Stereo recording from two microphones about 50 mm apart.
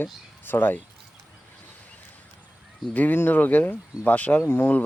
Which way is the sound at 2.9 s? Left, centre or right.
Left.